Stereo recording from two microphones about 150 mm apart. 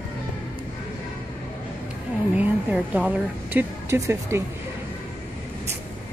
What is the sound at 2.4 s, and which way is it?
A woman's voice, 10° right (ahead or behind).